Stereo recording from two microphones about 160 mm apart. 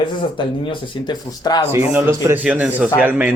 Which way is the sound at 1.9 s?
15° right (ahead or behind).